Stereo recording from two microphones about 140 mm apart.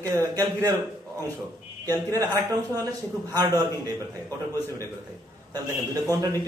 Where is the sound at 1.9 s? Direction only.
25° right (ahead or behind).